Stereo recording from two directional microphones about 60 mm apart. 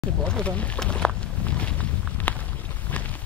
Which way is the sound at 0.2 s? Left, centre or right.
Centre.